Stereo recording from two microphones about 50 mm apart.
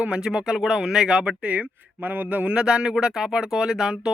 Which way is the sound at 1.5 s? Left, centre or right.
Right.